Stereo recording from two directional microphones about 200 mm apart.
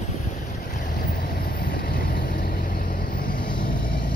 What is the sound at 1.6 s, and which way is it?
Vehicle, 45° left (ahead or behind).